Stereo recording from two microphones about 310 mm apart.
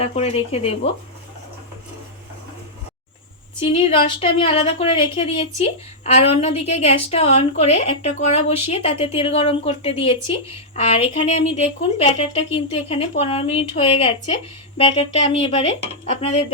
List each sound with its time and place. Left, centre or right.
0.0 s a woman's voice: centre
3.7 s a woman's voice: centre